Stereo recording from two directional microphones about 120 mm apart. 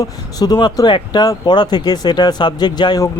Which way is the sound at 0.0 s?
30° left (ahead or behind).